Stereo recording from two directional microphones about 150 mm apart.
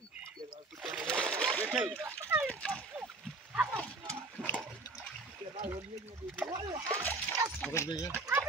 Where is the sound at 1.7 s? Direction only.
10° right (ahead or behind).